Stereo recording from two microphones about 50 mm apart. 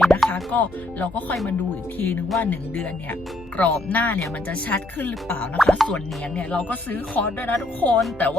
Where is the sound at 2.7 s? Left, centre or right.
Left.